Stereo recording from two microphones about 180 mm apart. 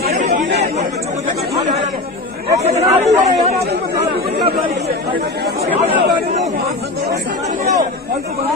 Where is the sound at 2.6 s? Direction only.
35° right (ahead or behind).